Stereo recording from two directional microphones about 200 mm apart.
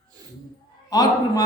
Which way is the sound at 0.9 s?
20° left (ahead or behind).